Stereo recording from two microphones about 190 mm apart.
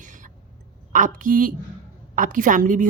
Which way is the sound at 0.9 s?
45° right (ahead or behind).